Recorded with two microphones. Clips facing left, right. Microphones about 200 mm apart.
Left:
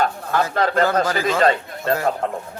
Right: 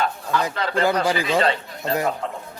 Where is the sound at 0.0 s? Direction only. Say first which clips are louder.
Left 3 dB; 50° left (ahead or behind).